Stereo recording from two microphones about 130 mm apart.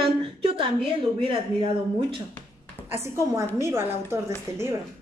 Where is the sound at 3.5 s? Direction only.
20° right (ahead or behind).